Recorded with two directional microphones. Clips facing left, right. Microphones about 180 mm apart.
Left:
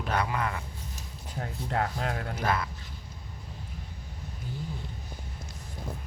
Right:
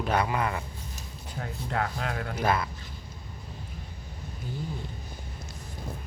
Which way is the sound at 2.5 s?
15° right (ahead or behind).